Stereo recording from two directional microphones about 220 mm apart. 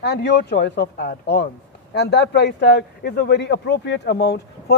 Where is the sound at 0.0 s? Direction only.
50° left (ahead or behind).